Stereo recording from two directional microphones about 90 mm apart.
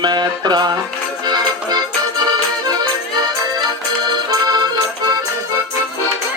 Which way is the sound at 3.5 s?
55° right (ahead or behind).